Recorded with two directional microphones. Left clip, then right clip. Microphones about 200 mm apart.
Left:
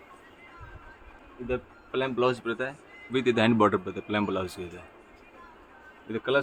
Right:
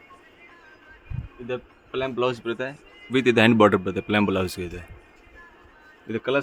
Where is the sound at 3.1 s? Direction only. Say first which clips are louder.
Right 6 dB; 60° right (ahead or behind).